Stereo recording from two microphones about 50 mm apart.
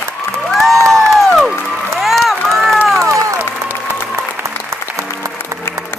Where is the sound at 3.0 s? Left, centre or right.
Right.